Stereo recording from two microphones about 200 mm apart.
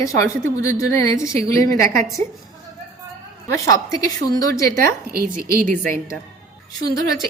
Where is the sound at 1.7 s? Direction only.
45° right (ahead or behind).